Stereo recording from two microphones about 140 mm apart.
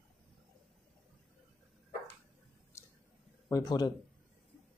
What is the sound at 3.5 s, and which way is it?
Speech, 25° left (ahead or behind).